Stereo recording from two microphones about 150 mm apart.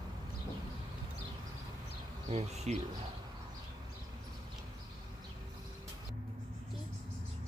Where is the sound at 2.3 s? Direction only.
45° right (ahead or behind).